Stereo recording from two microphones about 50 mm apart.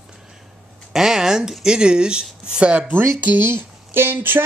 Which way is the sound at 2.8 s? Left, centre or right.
Right.